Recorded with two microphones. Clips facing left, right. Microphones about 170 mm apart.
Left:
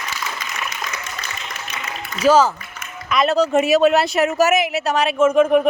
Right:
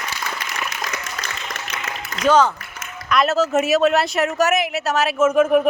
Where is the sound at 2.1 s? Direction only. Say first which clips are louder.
Left 2 dB; 5° left (ahead or behind).